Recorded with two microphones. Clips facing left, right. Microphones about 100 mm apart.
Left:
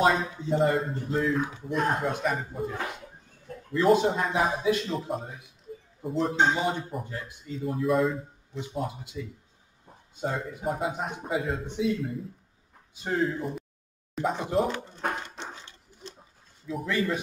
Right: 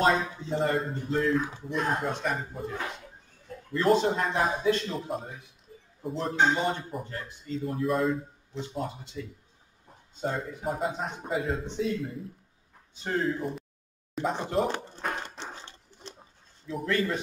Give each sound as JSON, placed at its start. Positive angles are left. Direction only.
{"t": 0.0, "sound": "speech", "side_deg": 0}
{"t": 3.7, "sound": "a man's voice", "side_deg": 5}
{"t": 10.2, "sound": "speech", "side_deg": 0}
{"t": 15.2, "sound": "a sound", "side_deg": -30}
{"t": 16.6, "sound": "speech", "side_deg": 5}